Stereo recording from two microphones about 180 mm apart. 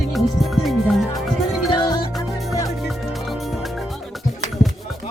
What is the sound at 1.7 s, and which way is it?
Music, 25° left (ahead or behind).